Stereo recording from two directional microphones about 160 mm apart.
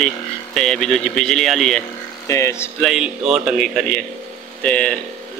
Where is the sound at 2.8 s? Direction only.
5° right (ahead or behind).